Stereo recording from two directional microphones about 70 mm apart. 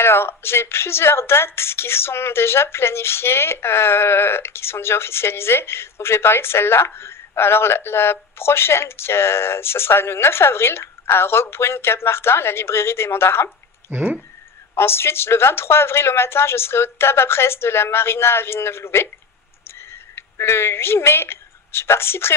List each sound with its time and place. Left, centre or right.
0.0 s speech: left
13.9 s speech: centre
14.8 s a woman's voice: left